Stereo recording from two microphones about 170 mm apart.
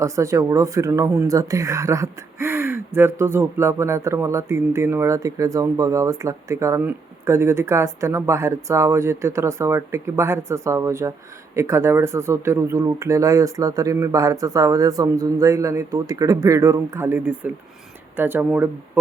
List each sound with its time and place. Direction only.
0.0 s speech: 20° right (ahead or behind)